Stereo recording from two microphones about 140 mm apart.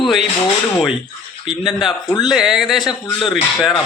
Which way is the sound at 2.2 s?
5° right (ahead or behind).